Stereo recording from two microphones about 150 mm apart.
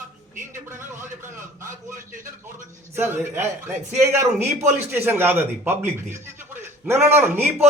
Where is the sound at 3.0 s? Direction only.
15° right (ahead or behind).